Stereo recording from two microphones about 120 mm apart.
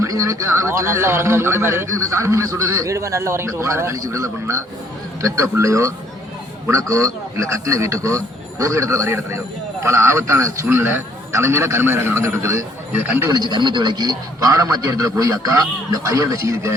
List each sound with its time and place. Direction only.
0.0 s speech: 25° right (ahead or behind)
13.3 s a man's voice: 35° right (ahead or behind)